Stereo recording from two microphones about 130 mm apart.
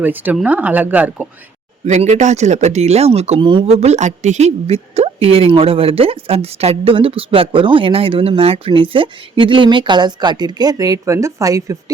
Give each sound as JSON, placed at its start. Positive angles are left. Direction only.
{"t": 0.0, "sound": "speech", "side_deg": -15}
{"t": 1.8, "sound": "a woman's voice", "side_deg": -60}